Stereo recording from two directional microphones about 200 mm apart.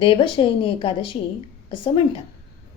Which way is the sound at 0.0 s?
25° left (ahead or behind).